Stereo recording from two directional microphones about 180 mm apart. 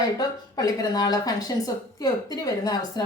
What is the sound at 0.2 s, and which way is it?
A woman's voice, 20° left (ahead or behind).